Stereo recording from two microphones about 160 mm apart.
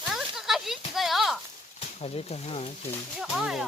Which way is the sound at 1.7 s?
40° left (ahead or behind).